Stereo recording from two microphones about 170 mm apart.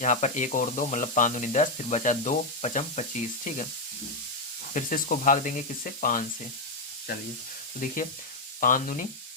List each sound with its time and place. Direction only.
0.0 s speech: 45° left (ahead or behind)
4.7 s speech: 50° left (ahead or behind)
8.6 s speech: 55° left (ahead or behind)